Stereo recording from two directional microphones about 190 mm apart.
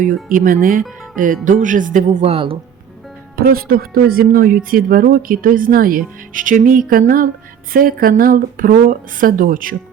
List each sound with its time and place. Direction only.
0.0 s speech: 45° right (ahead or behind); by 2.6 s 30° right (ahead or behind)
3.3 s speech: 50° right (ahead or behind)